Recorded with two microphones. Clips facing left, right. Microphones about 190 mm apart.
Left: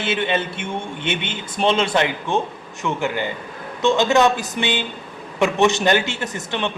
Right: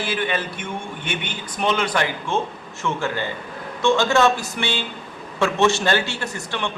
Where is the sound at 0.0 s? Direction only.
25° left (ahead or behind).